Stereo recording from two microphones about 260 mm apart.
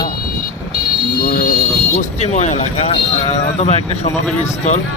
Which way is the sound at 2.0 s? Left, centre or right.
Left.